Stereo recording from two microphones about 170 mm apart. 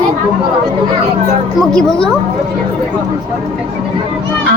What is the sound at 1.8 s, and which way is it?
Speech, 5° left (ahead or behind).